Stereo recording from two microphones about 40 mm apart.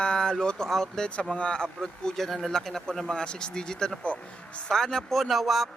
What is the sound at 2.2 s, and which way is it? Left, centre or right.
Speech, centre.